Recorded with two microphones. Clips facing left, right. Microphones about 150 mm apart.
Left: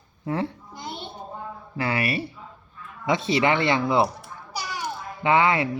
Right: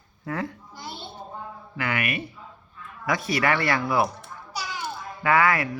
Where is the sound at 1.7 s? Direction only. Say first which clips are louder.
Left 3 dB; 30° left (ahead or behind).